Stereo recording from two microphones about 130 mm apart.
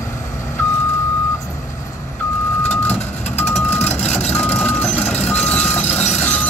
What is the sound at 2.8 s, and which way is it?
Reversing beeps, 15° left (ahead or behind).